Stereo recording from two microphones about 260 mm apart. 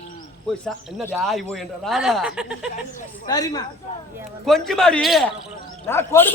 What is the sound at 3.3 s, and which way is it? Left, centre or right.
Speech, centre.